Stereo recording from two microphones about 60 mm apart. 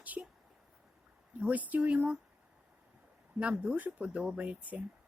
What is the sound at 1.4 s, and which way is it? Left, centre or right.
Speech, right.